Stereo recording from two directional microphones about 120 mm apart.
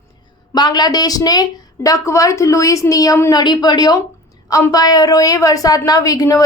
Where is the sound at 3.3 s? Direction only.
35° left (ahead or behind).